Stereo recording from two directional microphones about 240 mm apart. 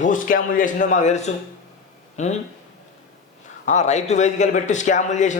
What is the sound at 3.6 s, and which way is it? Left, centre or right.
A man's voice, left.